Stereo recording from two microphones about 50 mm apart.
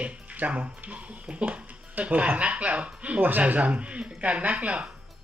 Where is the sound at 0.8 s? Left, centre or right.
Right.